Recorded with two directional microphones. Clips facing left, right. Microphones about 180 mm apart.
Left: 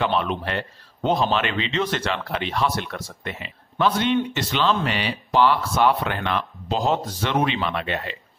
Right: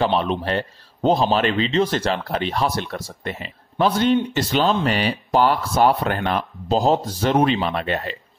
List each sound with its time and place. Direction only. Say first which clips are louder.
0.0 s a man's voice: right 3 dB; 35° right (ahead or behind)